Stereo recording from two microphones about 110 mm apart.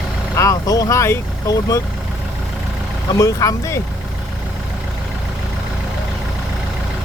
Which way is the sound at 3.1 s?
30° left (ahead or behind).